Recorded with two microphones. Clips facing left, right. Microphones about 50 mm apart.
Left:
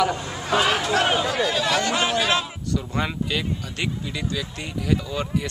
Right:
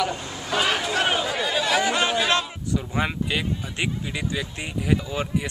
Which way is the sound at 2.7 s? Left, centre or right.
Centre.